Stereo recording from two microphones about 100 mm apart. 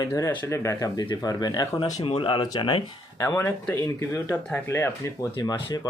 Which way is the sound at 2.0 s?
60° left (ahead or behind).